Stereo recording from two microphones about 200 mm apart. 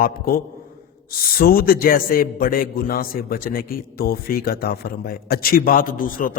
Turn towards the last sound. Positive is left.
turn(degrees=45)  # may be behind; listen again after turning